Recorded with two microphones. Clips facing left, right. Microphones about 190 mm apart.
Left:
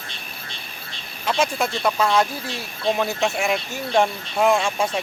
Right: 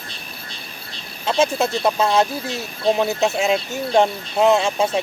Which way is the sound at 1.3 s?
25° right (ahead or behind).